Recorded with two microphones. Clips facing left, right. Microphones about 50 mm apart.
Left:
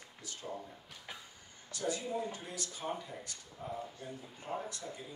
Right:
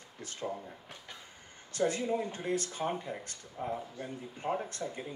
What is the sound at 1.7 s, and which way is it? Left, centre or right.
Speech, right.